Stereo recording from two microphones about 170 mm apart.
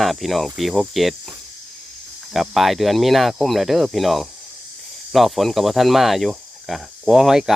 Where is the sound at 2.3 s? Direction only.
Centre (ahead or behind).